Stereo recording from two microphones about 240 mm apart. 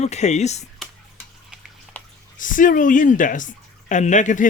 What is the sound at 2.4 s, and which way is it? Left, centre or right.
Speech, left.